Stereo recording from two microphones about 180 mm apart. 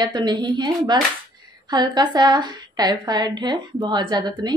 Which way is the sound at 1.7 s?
25° right (ahead or behind).